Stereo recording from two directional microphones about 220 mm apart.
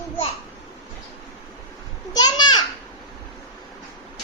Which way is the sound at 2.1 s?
20° left (ahead or behind).